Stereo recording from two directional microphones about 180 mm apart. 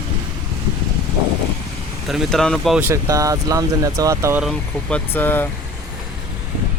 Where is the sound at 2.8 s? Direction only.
15° right (ahead or behind).